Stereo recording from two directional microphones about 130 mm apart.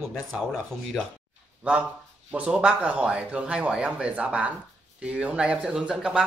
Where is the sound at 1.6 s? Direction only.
10° right (ahead or behind).